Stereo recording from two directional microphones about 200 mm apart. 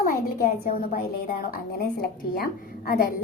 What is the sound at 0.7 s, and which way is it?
A woman's voice, 45° left (ahead or behind).